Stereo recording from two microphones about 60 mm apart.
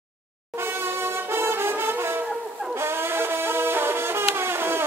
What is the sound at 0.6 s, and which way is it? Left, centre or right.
Brass instrument, right.